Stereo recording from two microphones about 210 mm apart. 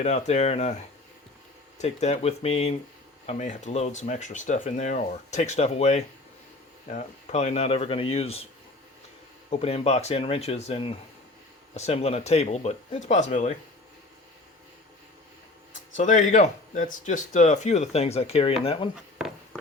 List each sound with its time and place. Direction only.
0.0 s speech: 35° left (ahead or behind)
1.8 s speech: 30° left (ahead or behind)
9.5 s speech: 30° left (ahead or behind)
16.0 s speech: 35° left (ahead or behind)